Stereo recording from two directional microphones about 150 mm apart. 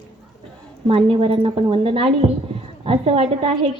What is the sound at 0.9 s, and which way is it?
A woman's voice, 40° right (ahead or behind).